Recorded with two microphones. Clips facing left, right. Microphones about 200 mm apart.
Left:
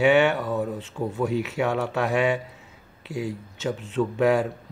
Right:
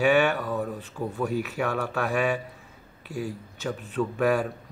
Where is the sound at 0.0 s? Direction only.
20° left (ahead or behind).